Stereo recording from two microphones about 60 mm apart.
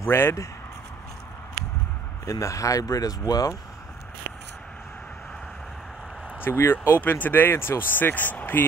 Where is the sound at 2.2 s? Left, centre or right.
Left.